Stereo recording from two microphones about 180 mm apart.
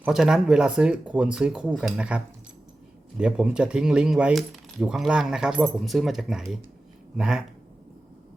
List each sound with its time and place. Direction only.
0.0 s speech: 5° right (ahead or behind)